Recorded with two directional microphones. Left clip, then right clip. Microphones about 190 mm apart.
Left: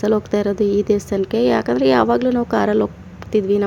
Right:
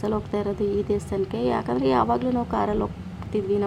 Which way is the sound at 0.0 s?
25° left (ahead or behind).